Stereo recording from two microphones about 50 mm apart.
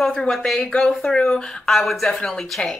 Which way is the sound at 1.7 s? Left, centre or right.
Centre.